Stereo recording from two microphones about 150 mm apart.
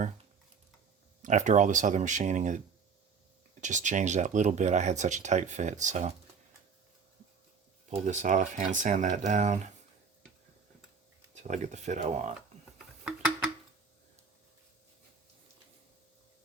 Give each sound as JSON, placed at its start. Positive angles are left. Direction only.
{"t": 1.2, "sound": "speech", "side_deg": -55}
{"t": 3.6, "sound": "speech", "side_deg": -55}
{"t": 7.9, "sound": "speech", "side_deg": -55}
{"t": 11.3, "sound": "speech", "side_deg": -55}
{"t": 13.1, "sound": "a sound", "side_deg": -5}